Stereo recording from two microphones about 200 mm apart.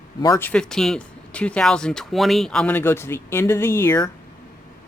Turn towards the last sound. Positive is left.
turn(degrees=15)  # may be behind; listen again after turning